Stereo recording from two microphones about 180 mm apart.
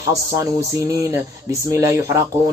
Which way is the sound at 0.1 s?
15° right (ahead or behind).